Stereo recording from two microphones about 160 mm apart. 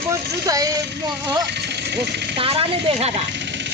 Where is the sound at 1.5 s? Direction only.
90° right.